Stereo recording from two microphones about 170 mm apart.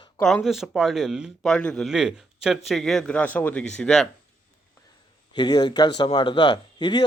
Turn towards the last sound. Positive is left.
turn(degrees=25)  # may be behind; listen again after turning